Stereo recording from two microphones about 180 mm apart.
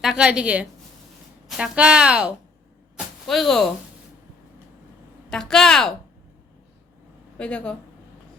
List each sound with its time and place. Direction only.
0.0 s speech: 5° right (ahead or behind)
5.3 s speech: centre (ahead or behind)
7.3 s speech: 5° left (ahead or behind)